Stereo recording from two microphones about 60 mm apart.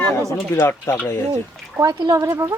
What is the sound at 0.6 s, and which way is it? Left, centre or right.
Speech, left.